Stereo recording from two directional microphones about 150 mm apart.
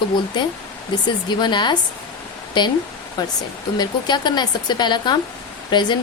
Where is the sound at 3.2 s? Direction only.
30° left (ahead or behind).